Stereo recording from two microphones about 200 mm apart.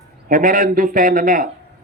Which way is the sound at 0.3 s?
45° right (ahead or behind).